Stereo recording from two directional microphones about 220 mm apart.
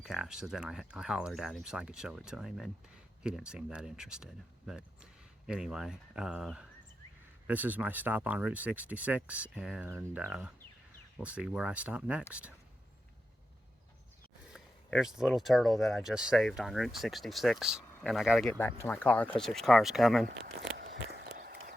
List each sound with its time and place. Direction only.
0.0 s speech: centre (ahead or behind)
14.5 s speech: centre (ahead or behind)
20.6 s a sound: 50° right (ahead or behind)
21.3 s run: 40° right (ahead or behind)